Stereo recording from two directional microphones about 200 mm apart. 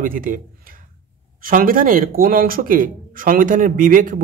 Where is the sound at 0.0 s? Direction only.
45° right (ahead or behind).